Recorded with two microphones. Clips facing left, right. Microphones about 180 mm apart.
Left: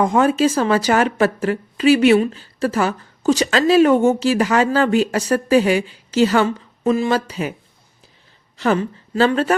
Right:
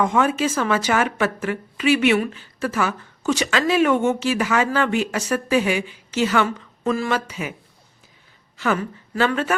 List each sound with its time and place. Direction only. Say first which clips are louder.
0.0 s a woman's voice: left 4 dB; 35° left (ahead or behind)
7.1 s a woman's voice: left 4 dB; 35° left (ahead or behind)
8.5 s a woman's voice: left 4 dB; 35° left (ahead or behind)